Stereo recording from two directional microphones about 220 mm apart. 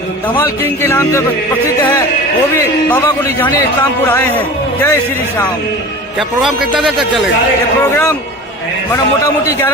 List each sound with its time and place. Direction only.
0.8 s a man's voice: 10° left (ahead or behind)
6.1 s a man's voice: centre (ahead or behind)
7.9 s a man's voice: 10° left (ahead or behind)